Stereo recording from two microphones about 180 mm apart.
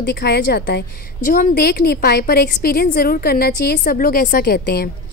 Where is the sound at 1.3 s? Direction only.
45° left (ahead or behind).